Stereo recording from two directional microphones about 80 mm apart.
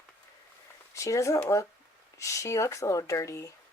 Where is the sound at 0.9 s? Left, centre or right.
Left.